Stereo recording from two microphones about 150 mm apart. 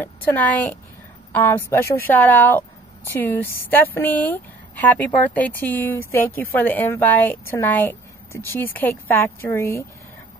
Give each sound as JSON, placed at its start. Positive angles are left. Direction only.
{"t": 0.0, "sound": "a woman's voice", "side_deg": 10}